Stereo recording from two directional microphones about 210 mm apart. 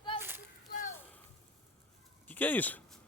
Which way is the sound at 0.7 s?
35° left (ahead or behind).